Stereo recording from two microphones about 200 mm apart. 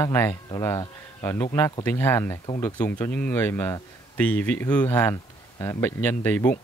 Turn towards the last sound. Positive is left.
turn(degrees=10)  # may be behind; listen again after turning